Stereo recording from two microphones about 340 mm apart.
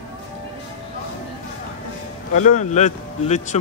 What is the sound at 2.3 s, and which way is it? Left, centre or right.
Speech, left.